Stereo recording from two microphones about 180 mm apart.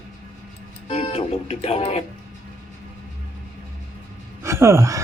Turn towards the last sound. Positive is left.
turn(degrees=-15)  # may be behind; listen again after turning